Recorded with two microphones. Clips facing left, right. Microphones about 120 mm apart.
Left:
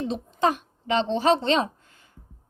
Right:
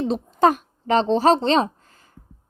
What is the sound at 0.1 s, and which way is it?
Speech, 40° right (ahead or behind).